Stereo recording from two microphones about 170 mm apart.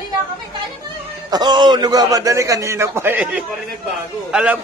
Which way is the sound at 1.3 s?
25° right (ahead or behind).